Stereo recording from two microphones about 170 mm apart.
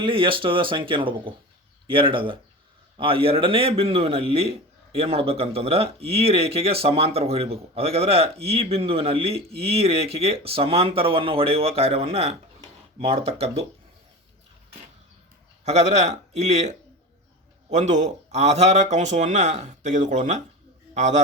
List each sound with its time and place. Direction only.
0.0 s speech: 30° right (ahead or behind)
15.6 s a man's voice: 40° right (ahead or behind)